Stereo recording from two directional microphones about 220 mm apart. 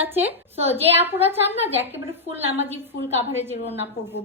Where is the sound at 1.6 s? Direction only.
10° right (ahead or behind).